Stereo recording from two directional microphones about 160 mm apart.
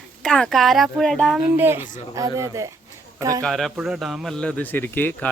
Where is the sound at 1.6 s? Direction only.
15° right (ahead or behind).